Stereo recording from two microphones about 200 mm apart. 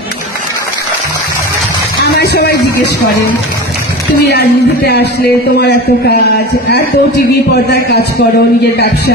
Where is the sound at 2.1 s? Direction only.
55° left (ahead or behind).